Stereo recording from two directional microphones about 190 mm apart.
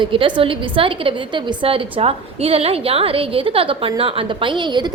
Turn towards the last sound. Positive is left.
turn(degrees=-25)  # may be behind; listen again after turning